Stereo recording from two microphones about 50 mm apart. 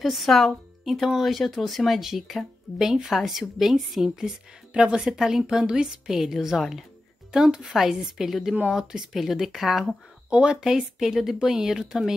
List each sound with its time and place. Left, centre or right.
0.0 s a woman's voice: centre
4.7 s a woman's voice: centre
10.3 s a woman's voice: centre